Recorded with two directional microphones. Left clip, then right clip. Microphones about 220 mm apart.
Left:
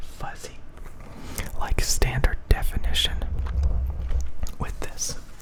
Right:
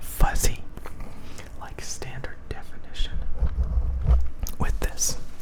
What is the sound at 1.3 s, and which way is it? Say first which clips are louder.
Whispering: left 10 dB; 25° left (ahead or behind).